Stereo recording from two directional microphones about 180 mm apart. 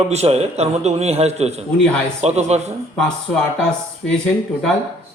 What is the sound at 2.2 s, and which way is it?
Speech, 40° right (ahead or behind).